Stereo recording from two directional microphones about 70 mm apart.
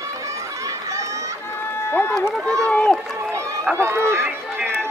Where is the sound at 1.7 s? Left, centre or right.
Left.